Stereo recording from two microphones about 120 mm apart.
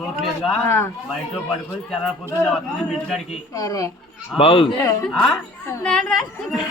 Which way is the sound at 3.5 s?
25° left (ahead or behind).